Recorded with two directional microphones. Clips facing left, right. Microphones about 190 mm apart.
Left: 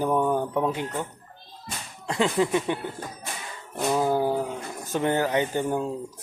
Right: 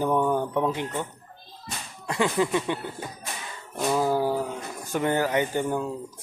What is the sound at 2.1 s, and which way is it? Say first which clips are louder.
Speech: left 1 dB; 20° left (ahead or behind).